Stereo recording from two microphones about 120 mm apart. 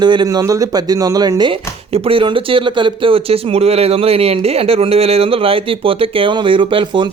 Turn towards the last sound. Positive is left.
turn(degrees=-45)  # may be behind; listen again after turning